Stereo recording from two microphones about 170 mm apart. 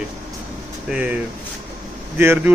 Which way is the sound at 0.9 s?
5° right (ahead or behind).